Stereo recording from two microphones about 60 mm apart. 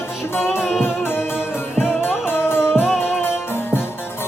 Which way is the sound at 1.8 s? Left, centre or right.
Centre.